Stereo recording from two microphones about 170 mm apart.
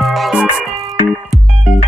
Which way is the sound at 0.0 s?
Centre (ahead or behind).